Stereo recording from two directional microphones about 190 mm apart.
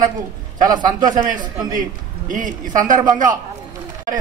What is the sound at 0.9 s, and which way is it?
A man's voice, 45° right (ahead or behind).